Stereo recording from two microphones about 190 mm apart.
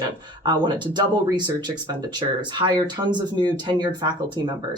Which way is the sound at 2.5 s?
25° right (ahead or behind).